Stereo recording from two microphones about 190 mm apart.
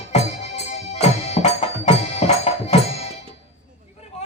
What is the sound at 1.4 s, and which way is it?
Music, 35° left (ahead or behind).